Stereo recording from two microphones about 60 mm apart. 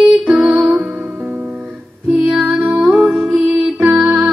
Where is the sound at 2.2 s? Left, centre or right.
Centre.